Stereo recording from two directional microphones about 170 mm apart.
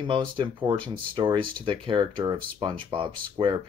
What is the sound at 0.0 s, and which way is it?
Speech, 30° right (ahead or behind).